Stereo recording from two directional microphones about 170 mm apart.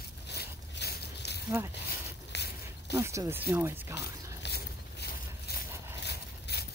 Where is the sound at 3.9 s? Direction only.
80° left.